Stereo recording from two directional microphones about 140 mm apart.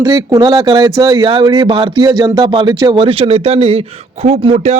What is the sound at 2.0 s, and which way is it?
Speech, 25° right (ahead or behind).